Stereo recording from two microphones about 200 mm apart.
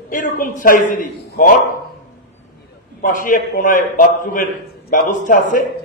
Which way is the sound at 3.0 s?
40° left (ahead or behind).